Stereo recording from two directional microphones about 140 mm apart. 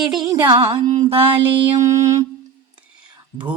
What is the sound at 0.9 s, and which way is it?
Music, 50° right (ahead or behind).